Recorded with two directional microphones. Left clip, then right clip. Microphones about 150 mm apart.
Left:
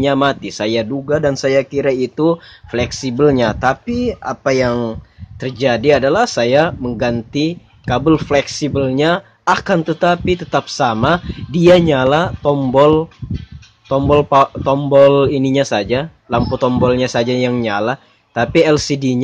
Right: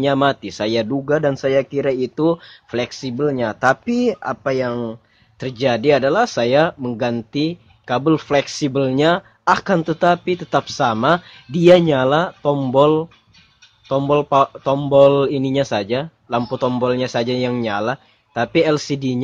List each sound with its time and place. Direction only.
0.0 s speech: 5° right (ahead or behind)
1.3 s speech: 5° right (ahead or behind)
3.2 s speech: 10° left (ahead or behind)
3.5 s speech: 15° right (ahead or behind)
3.8 s speech: 25° right (ahead or behind)
4.4 s speech: centre (ahead or behind)
5.4 s speech: 10° right (ahead or behind)